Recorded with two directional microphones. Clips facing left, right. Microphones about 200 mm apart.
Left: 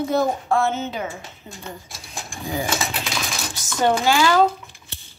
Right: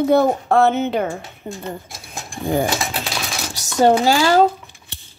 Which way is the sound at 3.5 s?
40° right (ahead or behind).